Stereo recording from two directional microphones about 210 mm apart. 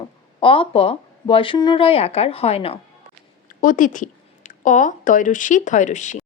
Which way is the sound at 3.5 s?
40° left (ahead or behind).